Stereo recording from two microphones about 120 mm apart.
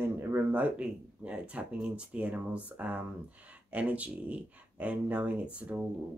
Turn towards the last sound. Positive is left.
turn(degrees=-10)  # may be behind; listen again after turning